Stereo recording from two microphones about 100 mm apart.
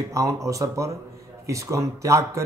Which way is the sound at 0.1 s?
35° right (ahead or behind).